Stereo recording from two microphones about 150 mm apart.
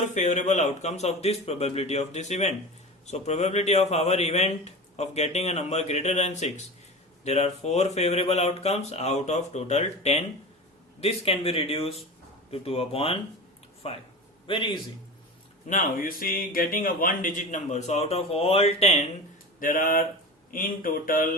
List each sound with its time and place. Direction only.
0.1 s a man's voice: 55° left (ahead or behind); by 14.8 s 35° left (ahead or behind)
15.7 s speech: 65° left (ahead or behind); by 19.0 s 45° left (ahead or behind)
19.5 s speech: 65° left (ahead or behind)